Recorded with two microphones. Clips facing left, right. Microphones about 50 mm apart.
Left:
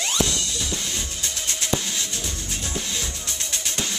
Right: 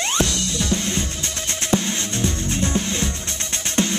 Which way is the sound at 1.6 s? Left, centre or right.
Right.